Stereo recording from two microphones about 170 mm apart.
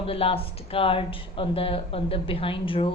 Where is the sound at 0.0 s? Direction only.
35° left (ahead or behind).